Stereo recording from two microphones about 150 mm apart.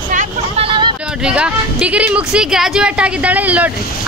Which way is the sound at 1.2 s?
5° right (ahead or behind).